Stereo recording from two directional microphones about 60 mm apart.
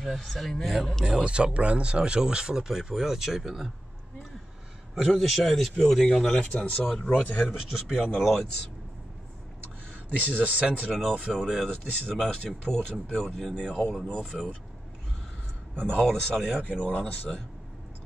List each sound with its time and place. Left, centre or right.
0.0 s a man's voice: centre
1.0 s speech: centre
4.9 s a man's voice: centre
6.3 s speech: centre
7.4 s a man's voice: centre
10.2 s speech: right
10.9 s a man's voice: centre
15.8 s speech: centre
16.6 s speech: left